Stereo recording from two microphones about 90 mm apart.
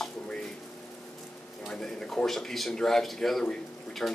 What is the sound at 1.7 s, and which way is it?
Speech, 5° left (ahead or behind).